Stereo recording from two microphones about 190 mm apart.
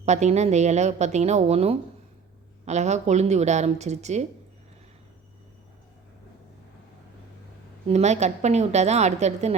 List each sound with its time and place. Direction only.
0.0 s speech: 35° right (ahead or behind)
7.9 s speech: 35° right (ahead or behind)